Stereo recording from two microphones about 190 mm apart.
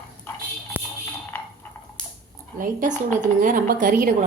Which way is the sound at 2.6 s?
45° right (ahead or behind).